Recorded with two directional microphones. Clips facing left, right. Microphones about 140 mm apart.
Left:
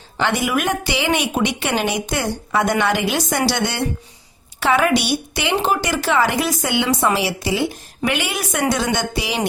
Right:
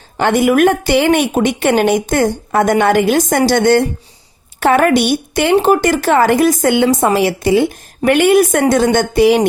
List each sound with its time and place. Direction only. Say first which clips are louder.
0.2 s a woman's voice: right 9 dB; 50° right (ahead or behind)